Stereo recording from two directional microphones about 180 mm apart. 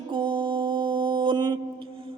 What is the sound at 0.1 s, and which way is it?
Mantra, 25° right (ahead or behind).